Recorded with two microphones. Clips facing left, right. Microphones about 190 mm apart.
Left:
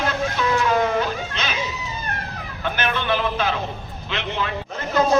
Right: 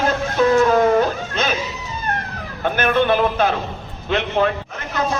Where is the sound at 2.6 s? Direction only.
50° right (ahead or behind).